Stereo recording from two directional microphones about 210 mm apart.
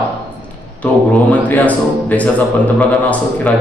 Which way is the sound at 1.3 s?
10° left (ahead or behind).